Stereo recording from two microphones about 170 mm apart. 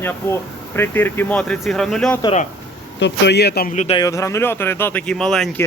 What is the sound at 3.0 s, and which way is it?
Speech, 90° left.